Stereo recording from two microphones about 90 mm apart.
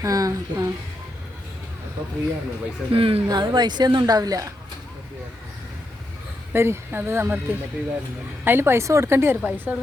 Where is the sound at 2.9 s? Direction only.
90° right.